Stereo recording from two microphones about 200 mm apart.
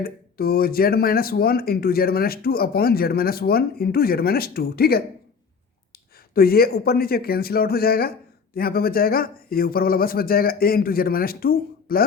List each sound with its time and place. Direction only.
0.0 s speech: 50° left (ahead or behind)
6.3 s speech: 50° left (ahead or behind)